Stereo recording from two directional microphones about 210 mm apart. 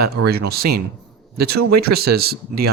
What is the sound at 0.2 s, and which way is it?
Speech, 90° right.